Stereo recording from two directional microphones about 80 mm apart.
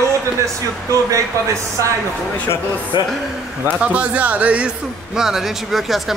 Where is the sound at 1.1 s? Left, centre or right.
Right.